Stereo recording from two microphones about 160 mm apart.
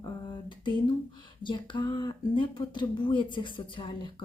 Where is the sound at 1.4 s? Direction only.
30° left (ahead or behind).